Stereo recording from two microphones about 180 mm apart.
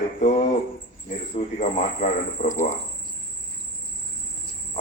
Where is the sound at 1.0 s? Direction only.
40° left (ahead or behind).